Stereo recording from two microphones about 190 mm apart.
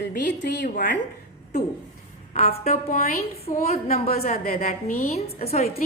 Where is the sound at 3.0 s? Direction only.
50° left (ahead or behind).